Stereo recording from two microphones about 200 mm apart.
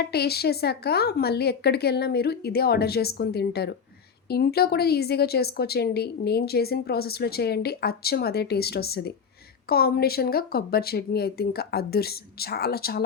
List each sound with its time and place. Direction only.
0.0 s speech: 55° left (ahead or behind)